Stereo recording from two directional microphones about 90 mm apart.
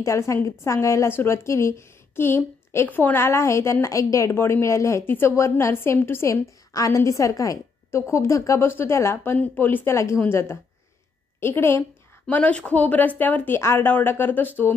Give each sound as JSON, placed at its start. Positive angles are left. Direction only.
{"t": 0.0, "sound": "a woman's voice", "side_deg": 35}
{"t": 12.3, "sound": "speech", "side_deg": 15}